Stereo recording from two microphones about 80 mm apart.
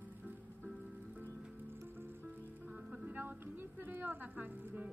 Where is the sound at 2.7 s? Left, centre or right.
Centre.